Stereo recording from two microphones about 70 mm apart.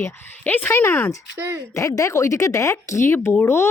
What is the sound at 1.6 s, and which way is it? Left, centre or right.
Speech, left.